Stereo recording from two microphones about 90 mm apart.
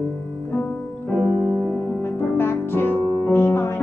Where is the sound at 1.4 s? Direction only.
10° right (ahead or behind).